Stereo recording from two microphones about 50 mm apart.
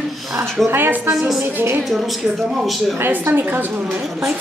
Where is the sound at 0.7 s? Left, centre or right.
Right.